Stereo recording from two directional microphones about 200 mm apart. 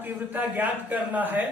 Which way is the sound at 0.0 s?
10° right (ahead or behind).